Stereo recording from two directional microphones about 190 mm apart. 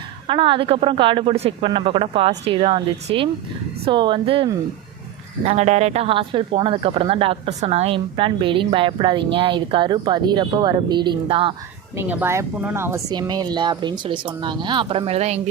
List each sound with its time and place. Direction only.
0.3 s speech: 25° right (ahead or behind)
11.9 s speech: 10° right (ahead or behind); by 15.4 s 35° right (ahead or behind)